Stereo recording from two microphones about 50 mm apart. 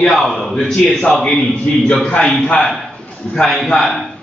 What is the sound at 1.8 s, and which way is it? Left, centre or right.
Speech, left.